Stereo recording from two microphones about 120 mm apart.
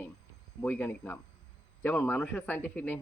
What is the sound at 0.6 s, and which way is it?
Speech, 15° left (ahead or behind).